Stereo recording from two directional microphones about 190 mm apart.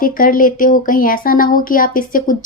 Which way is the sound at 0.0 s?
45° left (ahead or behind).